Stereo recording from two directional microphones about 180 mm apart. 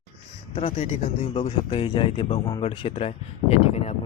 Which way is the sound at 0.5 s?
35° left (ahead or behind).